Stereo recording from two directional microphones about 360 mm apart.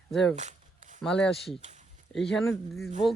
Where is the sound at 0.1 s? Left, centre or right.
Centre.